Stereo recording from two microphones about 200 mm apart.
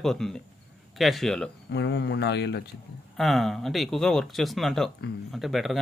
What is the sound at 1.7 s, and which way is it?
Speech, 60° left (ahead or behind).